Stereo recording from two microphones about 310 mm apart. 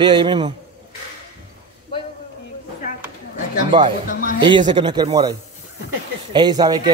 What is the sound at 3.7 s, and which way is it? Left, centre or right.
A man's voice, centre.